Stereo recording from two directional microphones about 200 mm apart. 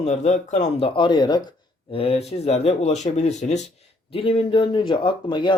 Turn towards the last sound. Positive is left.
turn(degrees=25)  # may be behind; listen again after turning